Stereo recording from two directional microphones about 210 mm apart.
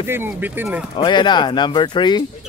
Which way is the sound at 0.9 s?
20° left (ahead or behind).